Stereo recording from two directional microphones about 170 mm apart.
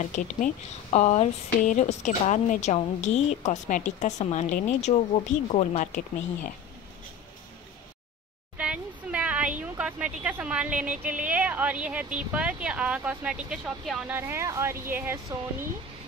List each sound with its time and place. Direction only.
0.0 s a woman's voice: 50° left (ahead or behind)
8.5 s a sound: 5° right (ahead or behind)
9.6 s a woman's voice: 5° right (ahead or behind)
14.1 s speech: 15° right (ahead or behind)